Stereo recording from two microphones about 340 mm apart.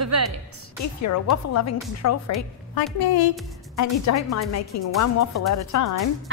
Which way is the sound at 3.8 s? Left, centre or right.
Left.